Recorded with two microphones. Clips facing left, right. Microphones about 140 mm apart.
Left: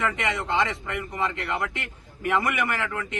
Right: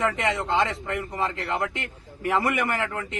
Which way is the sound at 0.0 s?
35° right (ahead or behind).